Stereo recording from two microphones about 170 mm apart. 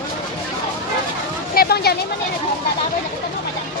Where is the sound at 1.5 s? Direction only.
65° left (ahead or behind).